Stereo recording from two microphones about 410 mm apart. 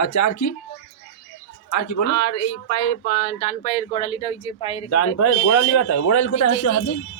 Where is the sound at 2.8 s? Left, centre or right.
Centre.